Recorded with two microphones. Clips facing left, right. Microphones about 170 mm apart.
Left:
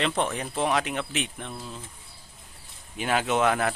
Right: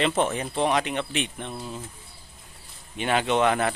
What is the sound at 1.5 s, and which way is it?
Speech, 10° right (ahead or behind).